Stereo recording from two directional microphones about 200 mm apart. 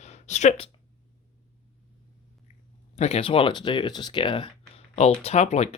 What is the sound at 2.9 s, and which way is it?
Speech, 30° left (ahead or behind).